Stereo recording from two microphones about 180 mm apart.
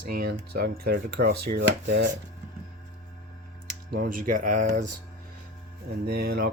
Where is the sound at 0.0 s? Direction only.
55° right (ahead or behind); by 2.1 s 75° right (ahead or behind).